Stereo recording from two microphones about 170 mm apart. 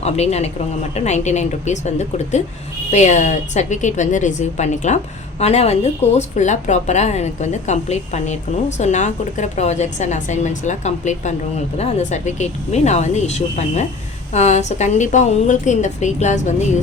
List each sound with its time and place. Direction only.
0.0 s a woman's voice: 40° left (ahead or behind)